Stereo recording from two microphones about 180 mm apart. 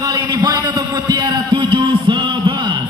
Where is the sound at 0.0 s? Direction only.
20° right (ahead or behind).